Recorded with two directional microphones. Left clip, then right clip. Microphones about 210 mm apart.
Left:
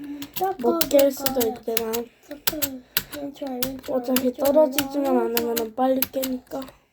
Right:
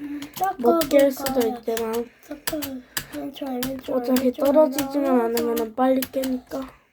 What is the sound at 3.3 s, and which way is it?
Speech, 50° right (ahead or behind).